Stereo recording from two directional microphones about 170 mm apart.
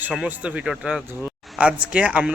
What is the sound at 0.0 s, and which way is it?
Speech, 5° right (ahead or behind).